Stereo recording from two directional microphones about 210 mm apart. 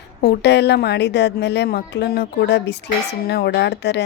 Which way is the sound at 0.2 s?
55° left (ahead or behind).